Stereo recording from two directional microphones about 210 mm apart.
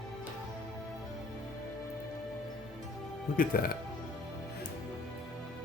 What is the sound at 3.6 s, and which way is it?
Speech, 40° left (ahead or behind).